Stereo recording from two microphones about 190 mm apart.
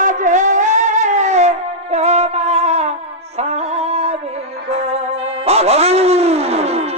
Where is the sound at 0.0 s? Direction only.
40° right (ahead or behind).